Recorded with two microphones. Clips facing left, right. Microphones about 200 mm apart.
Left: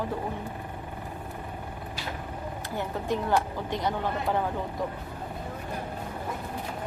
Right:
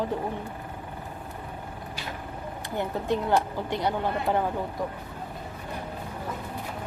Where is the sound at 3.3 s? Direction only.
15° right (ahead or behind).